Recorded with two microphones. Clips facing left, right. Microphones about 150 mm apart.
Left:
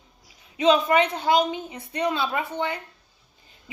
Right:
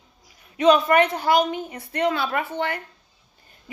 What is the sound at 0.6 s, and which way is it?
A woman's voice, 50° right (ahead or behind).